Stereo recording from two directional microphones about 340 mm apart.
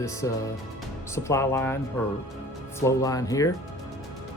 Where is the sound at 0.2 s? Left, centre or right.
Centre.